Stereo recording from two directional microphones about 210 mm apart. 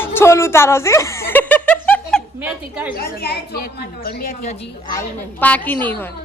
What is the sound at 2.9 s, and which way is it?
Speech, 45° left (ahead or behind).